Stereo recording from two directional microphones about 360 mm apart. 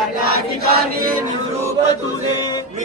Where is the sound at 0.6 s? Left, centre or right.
Right.